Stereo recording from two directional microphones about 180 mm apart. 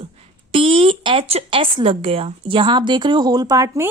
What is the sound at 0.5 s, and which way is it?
Speech, 30° right (ahead or behind).